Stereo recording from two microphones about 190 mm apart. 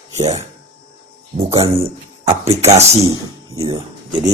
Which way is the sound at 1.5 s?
30° right (ahead or behind).